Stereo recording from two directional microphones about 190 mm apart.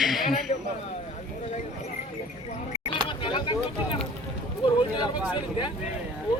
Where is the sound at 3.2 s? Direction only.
25° left (ahead or behind).